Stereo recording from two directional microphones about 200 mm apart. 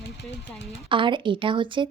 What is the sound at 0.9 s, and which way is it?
A woman's voice, 25° right (ahead or behind).